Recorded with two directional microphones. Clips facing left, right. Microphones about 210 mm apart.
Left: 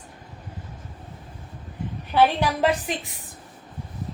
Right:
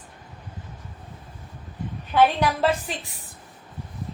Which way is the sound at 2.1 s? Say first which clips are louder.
Even; 10° left (ahead or behind).